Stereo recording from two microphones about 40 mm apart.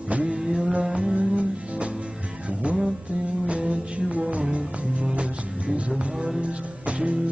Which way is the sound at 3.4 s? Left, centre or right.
Right.